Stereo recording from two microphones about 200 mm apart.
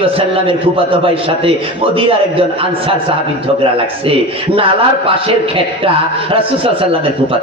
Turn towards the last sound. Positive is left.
turn(degrees=-25)  # may be behind; listen again after turning